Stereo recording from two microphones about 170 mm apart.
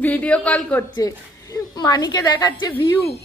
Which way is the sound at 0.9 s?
20° left (ahead or behind).